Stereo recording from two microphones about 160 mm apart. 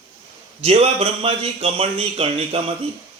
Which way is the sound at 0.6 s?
40° right (ahead or behind).